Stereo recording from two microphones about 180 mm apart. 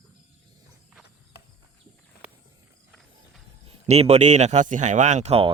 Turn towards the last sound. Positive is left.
turn(degrees=-35)  # may be behind; listen again after turning